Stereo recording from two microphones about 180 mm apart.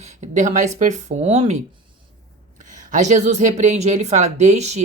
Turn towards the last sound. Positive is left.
turn(degrees=-40)  # may be behind; listen again after turning